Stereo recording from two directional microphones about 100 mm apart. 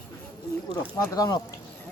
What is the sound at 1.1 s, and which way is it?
Speech, 40° left (ahead or behind).